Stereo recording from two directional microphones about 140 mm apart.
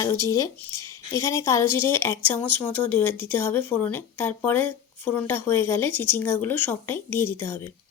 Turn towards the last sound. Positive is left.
turn(degrees=15)  # may be behind; listen again after turning